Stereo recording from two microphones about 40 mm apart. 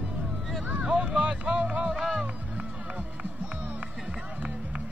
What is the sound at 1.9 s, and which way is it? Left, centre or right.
Music, centre.